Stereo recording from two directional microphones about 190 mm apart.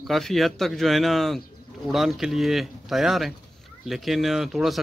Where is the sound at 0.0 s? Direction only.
Centre (ahead or behind).